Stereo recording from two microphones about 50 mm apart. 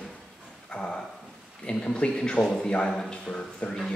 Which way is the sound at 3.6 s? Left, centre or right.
Left.